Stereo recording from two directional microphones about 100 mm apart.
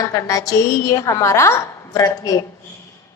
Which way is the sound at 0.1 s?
35° left (ahead or behind).